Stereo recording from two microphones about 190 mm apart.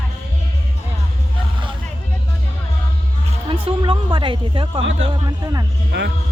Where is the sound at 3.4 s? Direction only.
25° right (ahead or behind).